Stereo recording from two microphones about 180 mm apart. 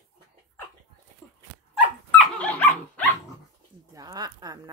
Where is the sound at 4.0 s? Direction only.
20° right (ahead or behind).